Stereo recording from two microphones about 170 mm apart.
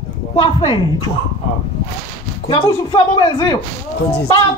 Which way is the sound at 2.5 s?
30° left (ahead or behind).